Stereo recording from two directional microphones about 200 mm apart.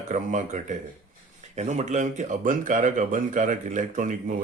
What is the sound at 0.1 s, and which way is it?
Speech, 40° right (ahead or behind).